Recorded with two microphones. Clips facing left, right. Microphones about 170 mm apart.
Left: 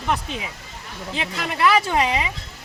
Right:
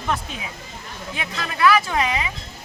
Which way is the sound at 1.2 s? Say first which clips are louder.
Even; 25° left (ahead or behind).